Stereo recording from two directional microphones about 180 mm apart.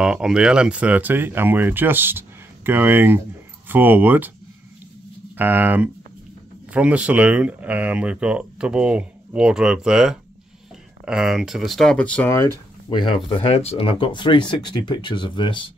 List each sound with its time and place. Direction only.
0.0 s speech: 5° right (ahead or behind)
5.4 s speech: 10° right (ahead or behind); by 12.5 s 10° left (ahead or behind)
12.9 s speech: 30° left (ahead or behind)